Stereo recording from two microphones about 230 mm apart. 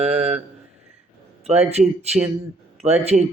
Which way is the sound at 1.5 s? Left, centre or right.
Right.